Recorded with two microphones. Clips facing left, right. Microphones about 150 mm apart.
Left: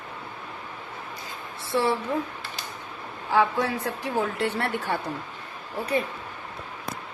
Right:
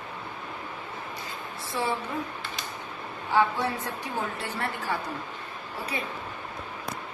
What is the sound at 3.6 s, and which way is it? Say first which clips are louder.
A woman's voice: left 3 dB; 90° left.